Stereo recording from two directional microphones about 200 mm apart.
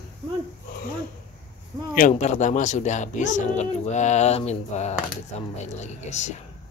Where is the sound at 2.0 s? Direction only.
35° left (ahead or behind).